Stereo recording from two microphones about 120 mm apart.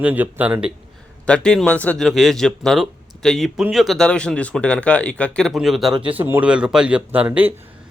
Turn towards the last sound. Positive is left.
turn(degrees=-15)  # may be behind; listen again after turning